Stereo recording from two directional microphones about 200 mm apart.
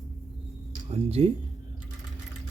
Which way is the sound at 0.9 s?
30° right (ahead or behind).